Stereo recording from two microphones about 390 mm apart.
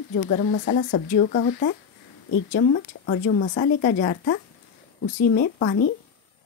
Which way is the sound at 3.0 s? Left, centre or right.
Centre.